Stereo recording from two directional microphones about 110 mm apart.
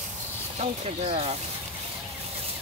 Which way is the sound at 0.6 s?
75° right (ahead or behind).